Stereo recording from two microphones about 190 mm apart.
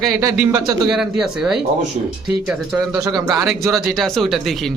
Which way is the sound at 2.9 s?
20° right (ahead or behind).